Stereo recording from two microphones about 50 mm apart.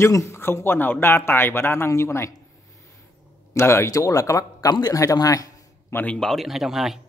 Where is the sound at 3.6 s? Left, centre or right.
Left.